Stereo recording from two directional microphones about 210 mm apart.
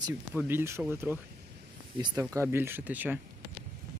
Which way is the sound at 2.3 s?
10° right (ahead or behind).